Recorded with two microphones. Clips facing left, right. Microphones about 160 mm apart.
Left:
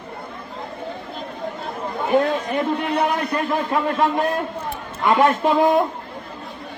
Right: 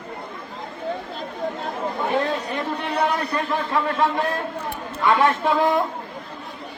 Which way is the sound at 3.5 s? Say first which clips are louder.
Left 2 dB; 15° left (ahead or behind).